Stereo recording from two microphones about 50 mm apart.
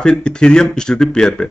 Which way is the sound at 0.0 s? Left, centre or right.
Centre.